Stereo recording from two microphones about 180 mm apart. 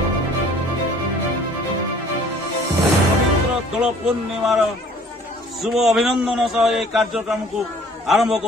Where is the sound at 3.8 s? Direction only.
5° right (ahead or behind).